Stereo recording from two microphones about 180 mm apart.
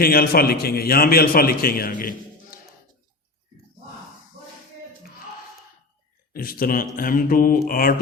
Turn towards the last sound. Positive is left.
turn(degrees=55)  # may be behind; listen again after turning